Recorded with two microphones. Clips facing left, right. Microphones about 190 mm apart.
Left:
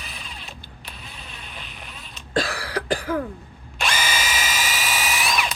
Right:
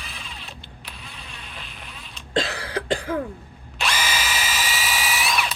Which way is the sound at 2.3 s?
25° right (ahead or behind).